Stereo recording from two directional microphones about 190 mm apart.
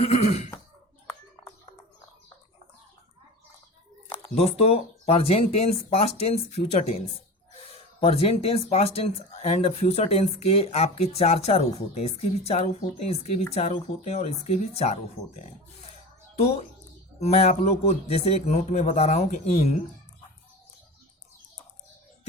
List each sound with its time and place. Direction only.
0.0 s cough: 35° left (ahead or behind)
4.1 s speech: 30° left (ahead or behind)
8.0 s speech: 30° left (ahead or behind)
17.2 s speech: 35° left (ahead or behind)